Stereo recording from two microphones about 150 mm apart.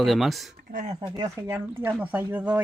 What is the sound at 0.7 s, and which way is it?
Speech, 50° right (ahead or behind).